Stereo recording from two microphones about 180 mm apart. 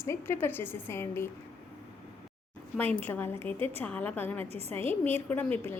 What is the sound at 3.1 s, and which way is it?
A woman's voice, 10° left (ahead or behind).